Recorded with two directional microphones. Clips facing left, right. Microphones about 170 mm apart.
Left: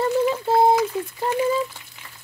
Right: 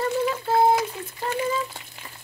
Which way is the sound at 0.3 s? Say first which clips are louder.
Even; 25° left (ahead or behind).